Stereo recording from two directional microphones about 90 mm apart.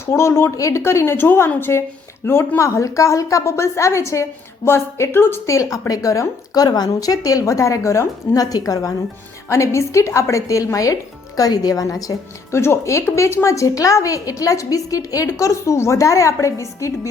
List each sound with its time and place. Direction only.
0.0 s a woman's voice: 30° left (ahead or behind)